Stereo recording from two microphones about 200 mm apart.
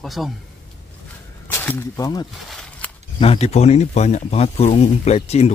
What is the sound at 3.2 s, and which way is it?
Speech, 30° left (ahead or behind).